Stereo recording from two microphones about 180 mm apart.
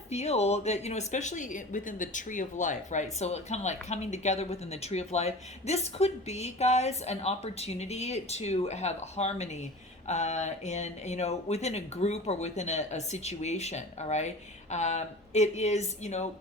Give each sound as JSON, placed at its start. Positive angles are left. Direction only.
{"t": 0.1, "sound": "speech", "side_deg": 35}